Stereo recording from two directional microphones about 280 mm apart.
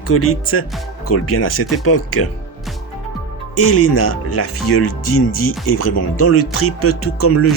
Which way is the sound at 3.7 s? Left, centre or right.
Left.